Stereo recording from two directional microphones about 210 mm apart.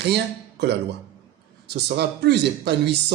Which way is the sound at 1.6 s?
55° right (ahead or behind).